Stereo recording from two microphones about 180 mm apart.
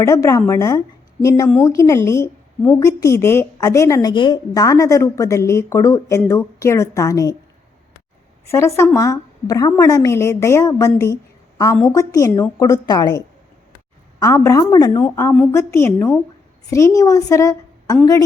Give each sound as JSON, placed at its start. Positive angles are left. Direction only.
{"t": 0.0, "sound": "a woman's voice", "side_deg": 15}
{"t": 8.4, "sound": "a woman's voice", "side_deg": 15}